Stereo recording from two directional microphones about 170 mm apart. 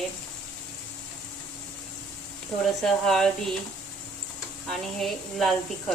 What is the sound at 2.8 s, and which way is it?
Speech, centre (ahead or behind).